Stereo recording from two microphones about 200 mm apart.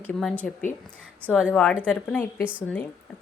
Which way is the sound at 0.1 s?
Centre (ahead or behind).